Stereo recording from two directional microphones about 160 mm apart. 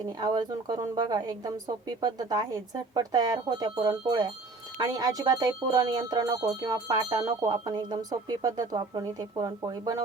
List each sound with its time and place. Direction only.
0.2 s speech: 25° right (ahead or behind)